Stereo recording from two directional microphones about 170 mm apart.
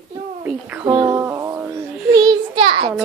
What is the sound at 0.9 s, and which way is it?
Speech, 25° right (ahead or behind).